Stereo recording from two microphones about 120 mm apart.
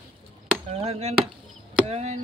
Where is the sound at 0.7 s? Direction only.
60° right (ahead or behind).